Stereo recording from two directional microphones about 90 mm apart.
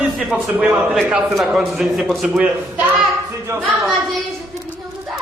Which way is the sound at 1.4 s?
5° right (ahead or behind).